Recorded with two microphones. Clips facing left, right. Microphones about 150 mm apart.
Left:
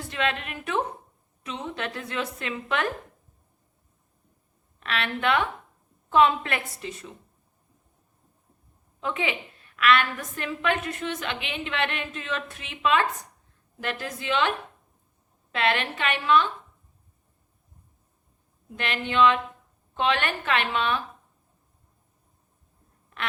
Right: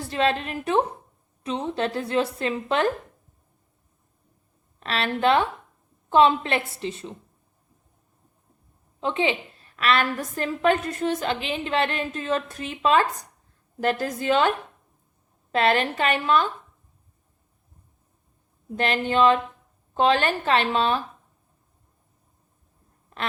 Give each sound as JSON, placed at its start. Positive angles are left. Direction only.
{"t": 0.1, "sound": "a woman's voice", "side_deg": -35}
{"t": 4.8, "sound": "a woman's voice", "side_deg": -35}
{"t": 9.0, "sound": "a woman's voice", "side_deg": -30}
{"t": 15.5, "sound": "a woman's voice", "side_deg": -40}
{"t": 18.8, "sound": "a woman's voice", "side_deg": -40}